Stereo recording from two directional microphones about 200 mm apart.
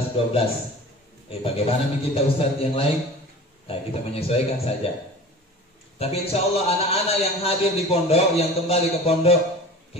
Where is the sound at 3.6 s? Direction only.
30° left (ahead or behind).